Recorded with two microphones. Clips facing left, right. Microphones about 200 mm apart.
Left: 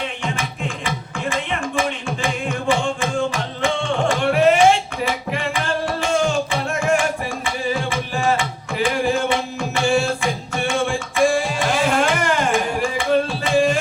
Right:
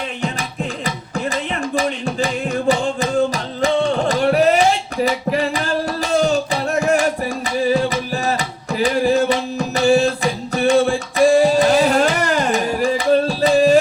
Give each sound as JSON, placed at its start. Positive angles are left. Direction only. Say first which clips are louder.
{"t": 0.9, "sound": "music", "louder": "right 2 dB", "side_deg": -40}